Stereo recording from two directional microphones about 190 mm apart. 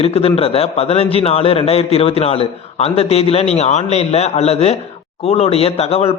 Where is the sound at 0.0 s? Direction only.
30° left (ahead or behind).